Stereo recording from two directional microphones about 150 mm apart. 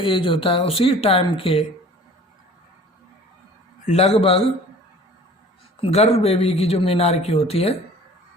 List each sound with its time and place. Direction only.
0.0 s speech: 35° left (ahead or behind)
3.8 s speech: 45° left (ahead or behind)
5.8 s speech: 45° left (ahead or behind)